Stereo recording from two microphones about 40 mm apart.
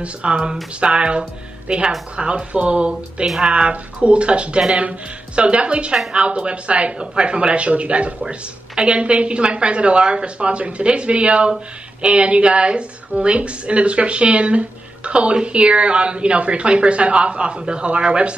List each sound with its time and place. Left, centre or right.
0.0 s speech: right